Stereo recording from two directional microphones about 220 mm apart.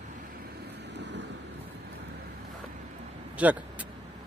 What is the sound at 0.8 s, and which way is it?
Vehicle, 50° right (ahead or behind).